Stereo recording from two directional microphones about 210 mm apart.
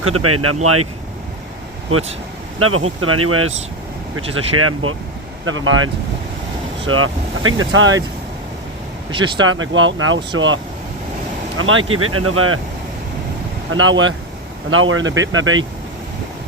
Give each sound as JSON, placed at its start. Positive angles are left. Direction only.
{"t": 0.0, "sound": "speech", "side_deg": -90}
{"t": 2.6, "sound": "speech", "side_deg": -90}
{"t": 5.5, "sound": "speech", "side_deg": -70}
{"t": 9.4, "sound": "speech", "side_deg": -70}
{"t": 11.9, "sound": "speech", "side_deg": -90}
{"t": 13.7, "sound": "speech", "side_deg": -70}